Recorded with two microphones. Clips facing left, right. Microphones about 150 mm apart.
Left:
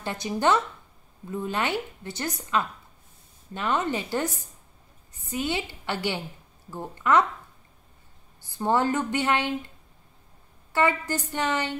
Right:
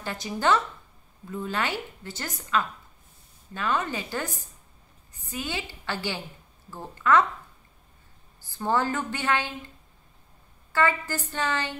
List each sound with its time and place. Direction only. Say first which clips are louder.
0.0 s a woman's voice: left 2 dB; 20° left (ahead or behind)
5.3 s a woman's voice: left 5 dB; 20° left (ahead or behind)
8.5 s a woman's voice: left 2 dB; 20° left (ahead or behind)
10.7 s a woman's voice: left 1 dB; 20° left (ahead or behind)